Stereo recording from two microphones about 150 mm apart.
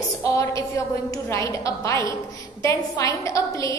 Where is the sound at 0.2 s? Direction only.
20° left (ahead or behind).